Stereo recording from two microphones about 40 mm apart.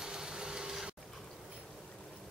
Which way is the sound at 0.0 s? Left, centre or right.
Centre.